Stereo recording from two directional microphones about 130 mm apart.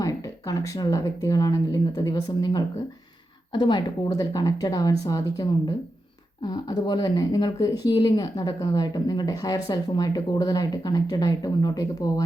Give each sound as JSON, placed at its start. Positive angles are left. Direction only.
{"t": 0.0, "sound": "speech", "side_deg": 25}